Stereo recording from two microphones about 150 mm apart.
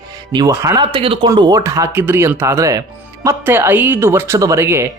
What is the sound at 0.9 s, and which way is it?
Speech, 35° right (ahead or behind).